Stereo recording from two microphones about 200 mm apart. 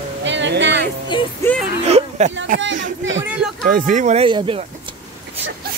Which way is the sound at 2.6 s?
70° right (ahead or behind).